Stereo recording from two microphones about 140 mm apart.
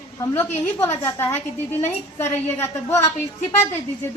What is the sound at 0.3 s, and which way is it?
A man's voice, 20° left (ahead or behind).